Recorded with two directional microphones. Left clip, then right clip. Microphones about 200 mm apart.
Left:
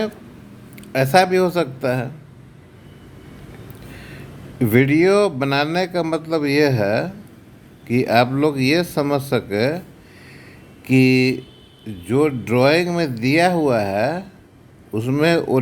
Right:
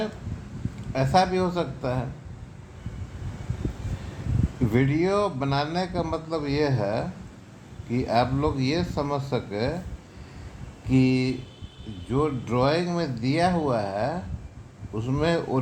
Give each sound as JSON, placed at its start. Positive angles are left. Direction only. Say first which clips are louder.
{"t": 0.9, "sound": "a man's voice", "louder": "left 7 dB", "side_deg": 50}
{"t": 4.6, "sound": "a man's voice", "louder": "left 9 dB", "side_deg": 50}
{"t": 10.8, "sound": "a man's voice", "louder": "left 8 dB", "side_deg": 50}